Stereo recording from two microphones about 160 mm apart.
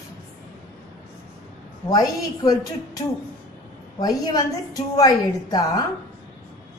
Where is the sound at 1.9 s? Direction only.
25° left (ahead or behind).